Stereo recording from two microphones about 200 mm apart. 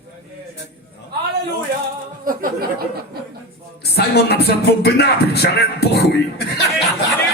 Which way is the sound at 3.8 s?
55° left (ahead or behind).